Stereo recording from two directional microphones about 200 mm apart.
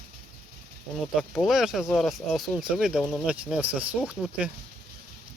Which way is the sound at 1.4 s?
Centre (ahead or behind).